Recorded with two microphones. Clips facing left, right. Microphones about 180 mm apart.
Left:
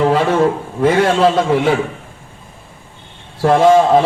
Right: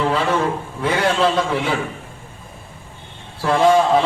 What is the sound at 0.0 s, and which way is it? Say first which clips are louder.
A man's voice: left 6 dB; 40° left (ahead or behind).